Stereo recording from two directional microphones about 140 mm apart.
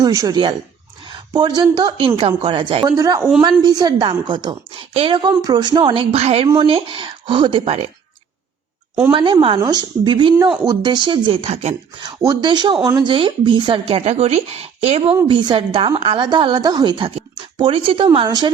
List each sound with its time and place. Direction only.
0.0 s speech: 25° right (ahead or behind)
2.9 s speech: 25° right (ahead or behind); by 7.9 s 45° right (ahead or behind)
9.1 s speech: 35° right (ahead or behind)
12.2 s speech: 30° right (ahead or behind)